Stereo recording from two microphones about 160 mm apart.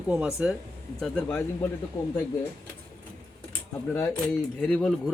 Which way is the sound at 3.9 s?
15° left (ahead or behind).